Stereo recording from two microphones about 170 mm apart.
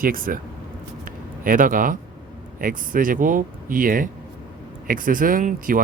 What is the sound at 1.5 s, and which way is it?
Speech, 55° right (ahead or behind).